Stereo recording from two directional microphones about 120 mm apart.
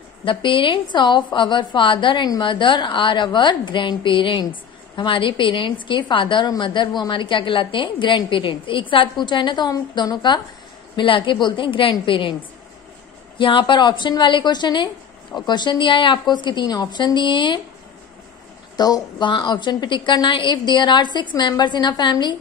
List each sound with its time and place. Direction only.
0.2 s a woman's voice: 45° left (ahead or behind)
13.4 s a woman's voice: 45° left (ahead or behind)
18.8 s a woman's voice: 35° left (ahead or behind)